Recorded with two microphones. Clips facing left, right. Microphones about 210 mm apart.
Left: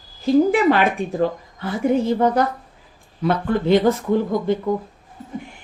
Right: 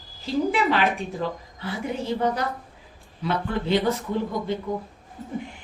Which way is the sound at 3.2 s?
50° left (ahead or behind).